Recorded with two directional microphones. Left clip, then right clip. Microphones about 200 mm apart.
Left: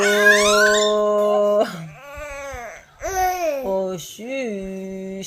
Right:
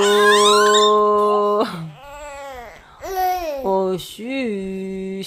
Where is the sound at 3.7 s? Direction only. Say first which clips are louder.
Right 4 dB; 35° right (ahead or behind).